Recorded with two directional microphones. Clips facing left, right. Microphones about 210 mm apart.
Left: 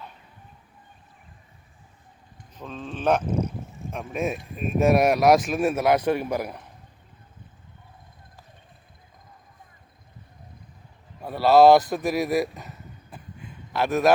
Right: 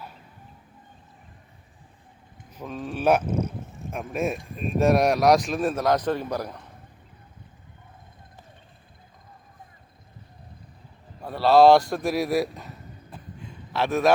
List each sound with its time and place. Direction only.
2.6 s speech: 10° right (ahead or behind); by 6.6 s 10° left (ahead or behind)
11.2 s speech: 5° left (ahead or behind)
13.7 s speech: centre (ahead or behind)